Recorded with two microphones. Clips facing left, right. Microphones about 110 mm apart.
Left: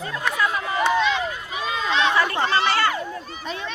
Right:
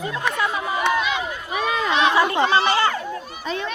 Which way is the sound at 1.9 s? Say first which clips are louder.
Right 2 dB; 15° right (ahead or behind).